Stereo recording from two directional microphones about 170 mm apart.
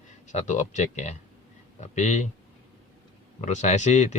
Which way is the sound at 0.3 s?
45° left (ahead or behind).